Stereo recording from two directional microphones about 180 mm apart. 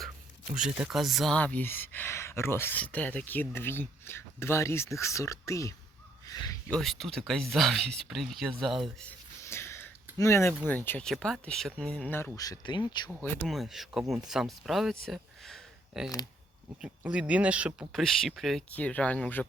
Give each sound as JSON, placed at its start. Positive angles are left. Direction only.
{"t": 0.5, "sound": "speech", "side_deg": -5}
{"t": 6.7, "sound": "speech", "side_deg": 5}
{"t": 9.4, "sound": "a sound", "side_deg": 15}
{"t": 10.7, "sound": "speech", "side_deg": 10}
{"t": 13.2, "sound": "speech", "side_deg": 10}
{"t": 13.5, "sound": "speech", "side_deg": 0}
{"t": 15.0, "sound": "a sound", "side_deg": 0}
{"t": 16.8, "sound": "speech", "side_deg": -5}